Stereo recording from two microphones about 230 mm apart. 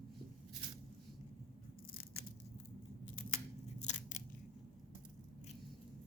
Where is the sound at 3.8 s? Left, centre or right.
Left.